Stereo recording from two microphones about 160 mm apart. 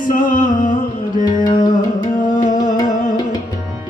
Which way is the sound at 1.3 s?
25° left (ahead or behind).